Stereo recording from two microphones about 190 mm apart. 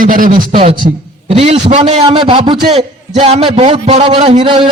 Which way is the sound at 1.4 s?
35° right (ahead or behind).